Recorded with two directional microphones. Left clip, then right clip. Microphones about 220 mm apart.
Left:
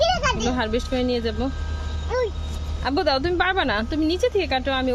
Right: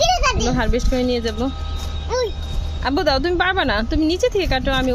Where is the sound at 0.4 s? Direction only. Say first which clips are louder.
Right 3 dB; centre (ahead or behind).